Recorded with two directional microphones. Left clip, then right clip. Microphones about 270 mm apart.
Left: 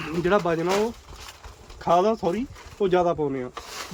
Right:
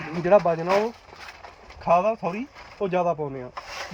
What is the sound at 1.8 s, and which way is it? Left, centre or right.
Speech, left.